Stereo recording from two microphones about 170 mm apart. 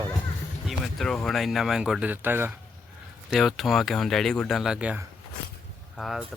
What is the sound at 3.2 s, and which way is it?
Speech, centre (ahead or behind).